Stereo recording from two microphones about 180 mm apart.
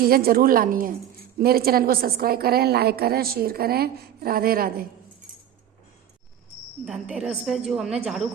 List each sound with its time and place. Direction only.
0.0 s a woman's voice: 55° right (ahead or behind)
6.8 s a woman's voice: 5° right (ahead or behind)